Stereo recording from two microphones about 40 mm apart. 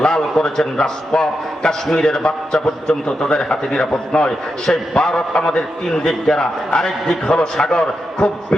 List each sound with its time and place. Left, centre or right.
0.0 s a man's voice: centre